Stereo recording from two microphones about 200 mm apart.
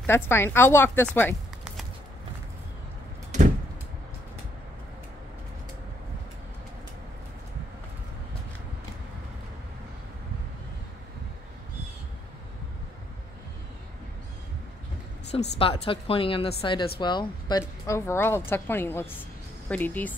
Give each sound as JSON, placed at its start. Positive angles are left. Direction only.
{"t": 0.0, "sound": "a woman's voice", "side_deg": 10}
{"t": 15.6, "sound": "a woman's voice", "side_deg": 30}